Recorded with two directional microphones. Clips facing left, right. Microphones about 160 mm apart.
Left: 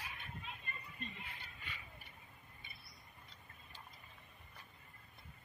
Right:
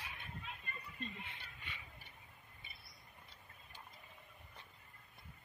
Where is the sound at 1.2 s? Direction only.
25° right (ahead or behind).